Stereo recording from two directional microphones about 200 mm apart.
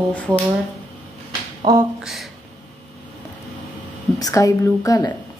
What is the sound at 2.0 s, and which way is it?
Speech, centre (ahead or behind).